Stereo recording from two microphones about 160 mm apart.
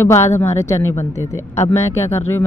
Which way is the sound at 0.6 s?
15° left (ahead or behind).